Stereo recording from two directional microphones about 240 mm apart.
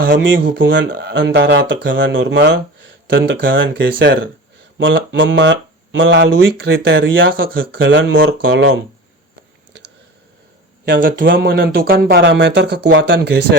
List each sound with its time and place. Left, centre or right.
0.0 s speech: right
10.8 s speech: right